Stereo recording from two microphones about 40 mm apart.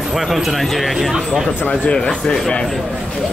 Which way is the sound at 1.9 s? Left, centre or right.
Centre.